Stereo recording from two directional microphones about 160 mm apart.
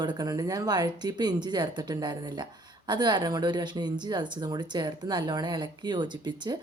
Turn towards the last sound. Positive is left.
turn(degrees=-30)  # may be behind; listen again after turning